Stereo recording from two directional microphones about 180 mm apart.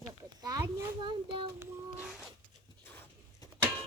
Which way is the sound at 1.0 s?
30° right (ahead or behind).